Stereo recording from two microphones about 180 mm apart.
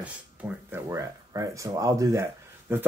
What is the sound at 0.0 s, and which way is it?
Speech, 10° right (ahead or behind).